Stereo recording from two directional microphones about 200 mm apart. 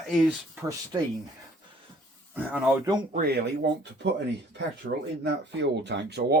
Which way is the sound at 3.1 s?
45° right (ahead or behind).